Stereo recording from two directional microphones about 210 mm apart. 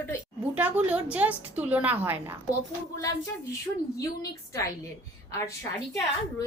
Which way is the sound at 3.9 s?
15° left (ahead or behind).